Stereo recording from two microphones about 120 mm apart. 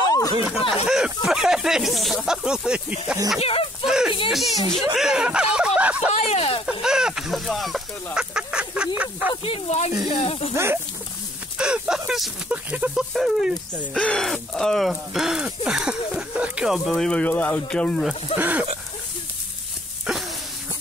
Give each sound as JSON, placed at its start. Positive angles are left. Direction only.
{"t": 0.0, "sound": "a sound", "side_deg": 30}
{"t": 0.8, "sound": "speech", "side_deg": -5}
{"t": 3.3, "sound": "speech", "side_deg": 55}
{"t": 3.8, "sound": "a sound", "side_deg": -5}
{"t": 4.3, "sound": "speech", "side_deg": 0}
{"t": 6.3, "sound": "speech", "side_deg": 55}
{"t": 6.6, "sound": "a sound", "side_deg": -5}
{"t": 9.4, "sound": "speech", "side_deg": 60}
{"t": 10.5, "sound": "speech", "side_deg": -20}
{"t": 11.5, "sound": "speech", "side_deg": -10}
{"t": 13.9, "sound": "speech", "side_deg": 5}
{"t": 18.0, "sound": "speech", "side_deg": -15}
{"t": 20.1, "sound": "a sound", "side_deg": -5}